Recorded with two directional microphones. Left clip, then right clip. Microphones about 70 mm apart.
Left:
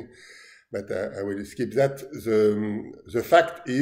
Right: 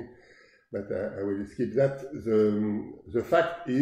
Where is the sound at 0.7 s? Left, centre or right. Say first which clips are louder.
Left 3 dB; left.